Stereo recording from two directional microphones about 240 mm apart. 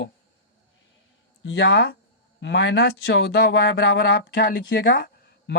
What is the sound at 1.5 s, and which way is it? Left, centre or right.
Speech, left.